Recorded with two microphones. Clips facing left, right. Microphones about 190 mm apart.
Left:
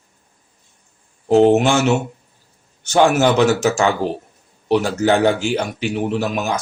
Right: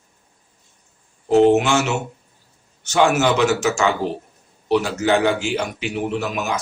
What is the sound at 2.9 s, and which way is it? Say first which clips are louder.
Speech: left 3 dB; 35° left (ahead or behind).